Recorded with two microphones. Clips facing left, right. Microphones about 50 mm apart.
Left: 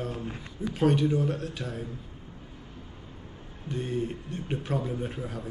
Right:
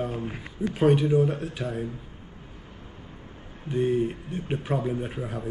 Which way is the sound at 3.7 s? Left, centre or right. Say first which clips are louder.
Right 7 dB; centre.